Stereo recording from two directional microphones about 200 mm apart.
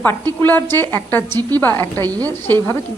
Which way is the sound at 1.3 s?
20° right (ahead or behind).